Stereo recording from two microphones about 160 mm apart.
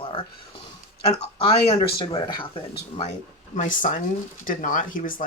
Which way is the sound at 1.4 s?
35° left (ahead or behind).